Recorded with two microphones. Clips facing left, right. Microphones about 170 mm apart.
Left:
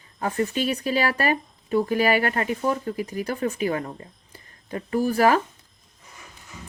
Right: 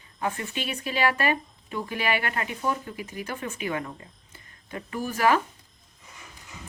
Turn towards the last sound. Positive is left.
turn(degrees=40)  # may be behind; listen again after turning